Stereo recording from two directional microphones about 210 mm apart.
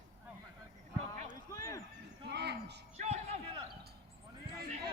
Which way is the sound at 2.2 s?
50° right (ahead or behind).